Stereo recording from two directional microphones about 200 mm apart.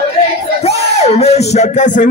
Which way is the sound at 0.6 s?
30° left (ahead or behind).